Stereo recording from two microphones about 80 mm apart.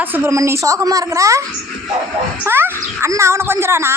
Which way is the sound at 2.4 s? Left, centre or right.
Right.